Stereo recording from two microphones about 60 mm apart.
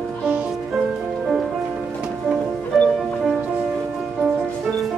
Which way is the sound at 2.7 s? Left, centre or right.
Centre.